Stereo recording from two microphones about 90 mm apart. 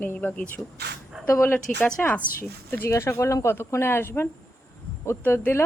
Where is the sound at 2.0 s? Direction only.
15° left (ahead or behind).